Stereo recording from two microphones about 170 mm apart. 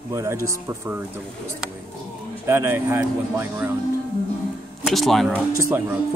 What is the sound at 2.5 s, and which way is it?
Speech, 15° right (ahead or behind).